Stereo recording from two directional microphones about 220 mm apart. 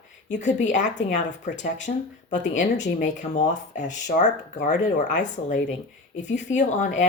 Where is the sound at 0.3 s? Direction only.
35° left (ahead or behind).